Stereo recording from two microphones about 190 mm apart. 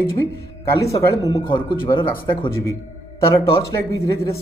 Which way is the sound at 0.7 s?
15° left (ahead or behind).